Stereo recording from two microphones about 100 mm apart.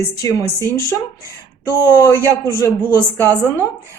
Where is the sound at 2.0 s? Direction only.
30° left (ahead or behind).